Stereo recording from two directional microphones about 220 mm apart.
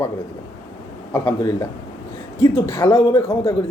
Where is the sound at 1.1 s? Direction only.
15° left (ahead or behind).